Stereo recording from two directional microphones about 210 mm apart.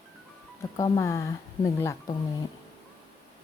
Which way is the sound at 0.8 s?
15° left (ahead or behind).